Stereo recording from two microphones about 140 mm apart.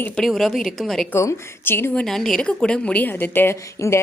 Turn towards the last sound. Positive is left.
turn(degrees=20)  # may be behind; listen again after turning